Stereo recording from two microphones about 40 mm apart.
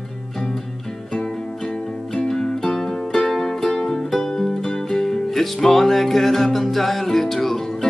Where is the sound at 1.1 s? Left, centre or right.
Left.